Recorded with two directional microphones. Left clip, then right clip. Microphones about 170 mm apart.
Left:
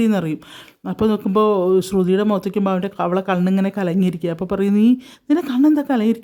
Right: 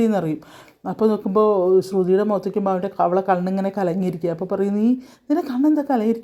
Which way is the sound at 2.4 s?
30° left (ahead or behind).